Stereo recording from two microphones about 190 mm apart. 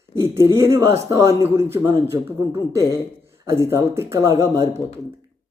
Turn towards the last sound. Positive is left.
turn(degrees=-15)  # may be behind; listen again after turning